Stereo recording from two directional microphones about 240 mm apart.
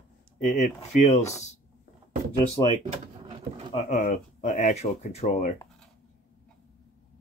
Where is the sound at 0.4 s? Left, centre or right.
Left.